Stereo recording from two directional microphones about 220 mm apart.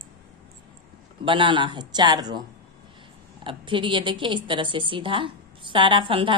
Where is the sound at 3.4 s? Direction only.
20° right (ahead or behind).